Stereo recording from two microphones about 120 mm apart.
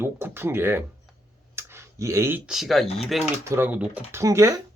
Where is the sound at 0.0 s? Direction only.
20° right (ahead or behind).